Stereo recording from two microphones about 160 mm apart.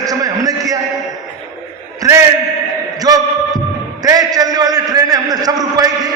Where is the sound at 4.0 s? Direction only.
25° right (ahead or behind).